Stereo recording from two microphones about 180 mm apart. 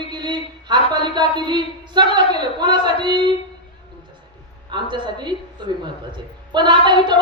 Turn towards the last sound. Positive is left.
turn(degrees=-25)  # may be behind; listen again after turning